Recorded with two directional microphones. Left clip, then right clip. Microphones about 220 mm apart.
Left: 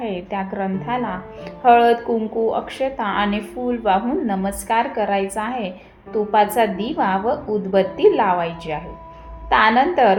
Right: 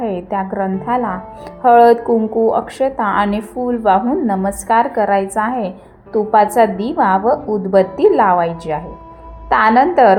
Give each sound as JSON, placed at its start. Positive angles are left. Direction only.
{"t": 0.0, "sound": "a woman's voice", "side_deg": -25}